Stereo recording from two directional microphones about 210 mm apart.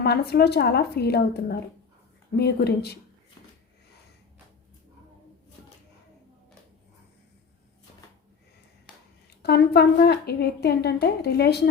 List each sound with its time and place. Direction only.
0.0 s a woman's voice: 50° left (ahead or behind)
9.4 s a woman's voice: 50° left (ahead or behind)